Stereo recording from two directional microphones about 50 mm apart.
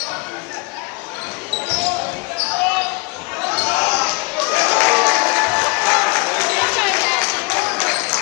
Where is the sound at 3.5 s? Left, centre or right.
Centre.